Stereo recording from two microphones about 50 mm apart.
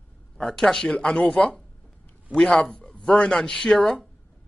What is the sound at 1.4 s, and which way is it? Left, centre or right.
Speech, left.